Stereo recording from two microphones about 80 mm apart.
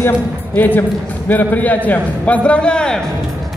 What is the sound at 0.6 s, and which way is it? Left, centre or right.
A man's voice, left.